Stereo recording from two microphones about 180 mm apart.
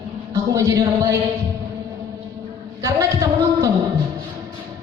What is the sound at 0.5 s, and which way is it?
Music, 20° right (ahead or behind).